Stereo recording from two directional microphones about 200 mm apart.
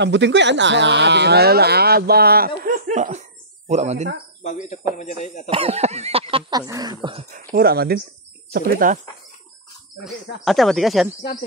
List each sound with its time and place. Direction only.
0.0 s speech: 60° right (ahead or behind); by 4.1 s 35° right (ahead or behind)
4.4 s speech: 35° left (ahead or behind)
5.5 s a sound: 30° right (ahead or behind)
7.2 s speech: 45° right (ahead or behind)
10.0 s speech: centre (ahead or behind)